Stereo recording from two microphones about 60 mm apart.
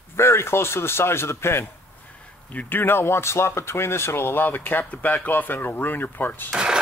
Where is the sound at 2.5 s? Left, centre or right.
Left.